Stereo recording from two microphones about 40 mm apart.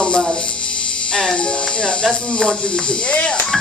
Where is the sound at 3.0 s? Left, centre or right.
Left.